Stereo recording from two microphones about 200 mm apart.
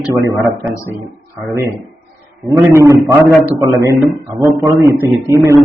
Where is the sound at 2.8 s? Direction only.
15° right (ahead or behind).